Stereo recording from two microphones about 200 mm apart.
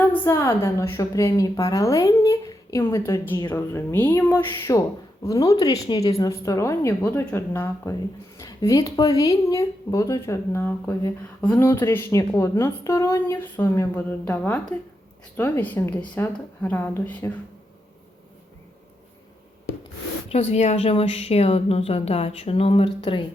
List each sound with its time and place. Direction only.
0.1 s speech: 15° left (ahead or behind)
20.3 s a woman's voice: 30° left (ahead or behind)